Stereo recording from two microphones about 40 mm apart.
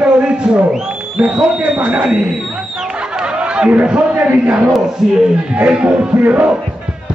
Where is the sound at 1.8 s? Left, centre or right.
Right.